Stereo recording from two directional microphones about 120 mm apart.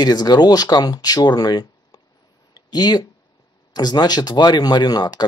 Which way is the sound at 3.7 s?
35° left (ahead or behind).